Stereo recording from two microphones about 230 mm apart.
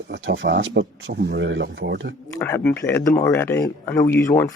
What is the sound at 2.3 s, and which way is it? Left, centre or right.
Speech, centre.